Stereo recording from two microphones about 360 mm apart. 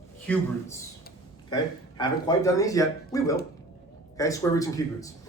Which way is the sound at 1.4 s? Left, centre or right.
Centre.